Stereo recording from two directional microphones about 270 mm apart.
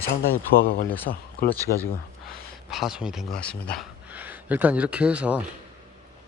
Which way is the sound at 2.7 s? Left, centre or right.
Centre.